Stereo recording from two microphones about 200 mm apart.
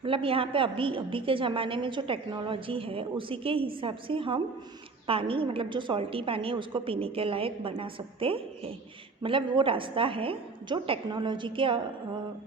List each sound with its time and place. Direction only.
0.0 s a woman's voice: 25° right (ahead or behind)